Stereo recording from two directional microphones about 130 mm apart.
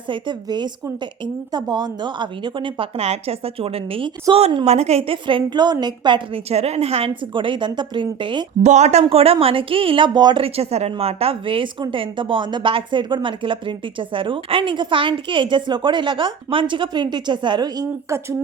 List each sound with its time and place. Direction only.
0.1 s a woman's voice: 35° right (ahead or behind)
4.6 s a woman's voice: 55° right (ahead or behind); by 6.4 s 35° right (ahead or behind)
6.5 s a woman's voice: 55° right (ahead or behind); by 8.4 s 40° right (ahead or behind)
8.6 s speech: 60° right (ahead or behind); by 10.4 s 35° right (ahead or behind)
10.4 s a woman's voice: 50° right (ahead or behind); by 18.3 s 25° right (ahead or behind)